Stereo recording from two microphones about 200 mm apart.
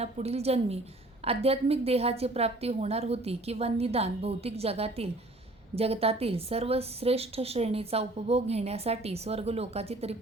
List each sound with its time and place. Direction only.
0.0 s a woman's voice: 30° right (ahead or behind)